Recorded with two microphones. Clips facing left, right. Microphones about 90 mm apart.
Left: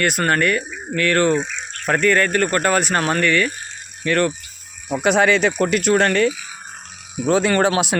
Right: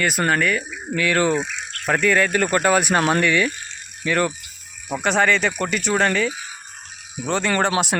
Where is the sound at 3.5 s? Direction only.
40° left (ahead or behind).